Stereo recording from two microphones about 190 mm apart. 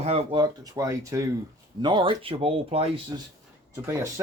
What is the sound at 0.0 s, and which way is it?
Speech, 30° right (ahead or behind).